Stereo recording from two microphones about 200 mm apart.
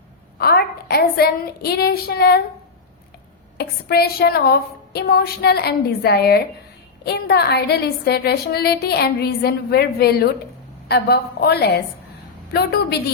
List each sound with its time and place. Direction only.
0.3 s a woman's voice: 50° left (ahead or behind)
3.6 s a woman's voice: 50° left (ahead or behind)